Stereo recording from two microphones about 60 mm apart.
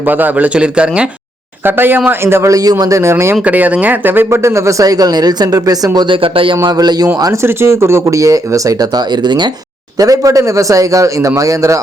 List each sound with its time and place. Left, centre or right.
0.0 s speech: right
1.6 s speech: right
2.5 s speech: right
3.0 s speech: right
3.4 s speech: right
4.3 s speech: right
4.9 s speech: right
7.4 s a man's voice: right
10.0 s a man's voice: right